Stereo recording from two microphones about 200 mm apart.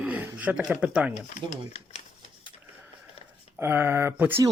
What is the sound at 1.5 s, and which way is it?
Speech, 30° left (ahead or behind).